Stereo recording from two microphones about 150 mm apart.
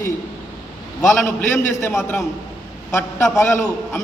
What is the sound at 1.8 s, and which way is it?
A man's voice, 15° left (ahead or behind).